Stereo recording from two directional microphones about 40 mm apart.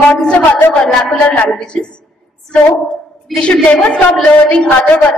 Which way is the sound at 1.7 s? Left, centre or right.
Left.